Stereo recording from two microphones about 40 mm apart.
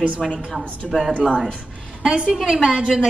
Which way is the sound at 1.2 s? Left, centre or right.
Right.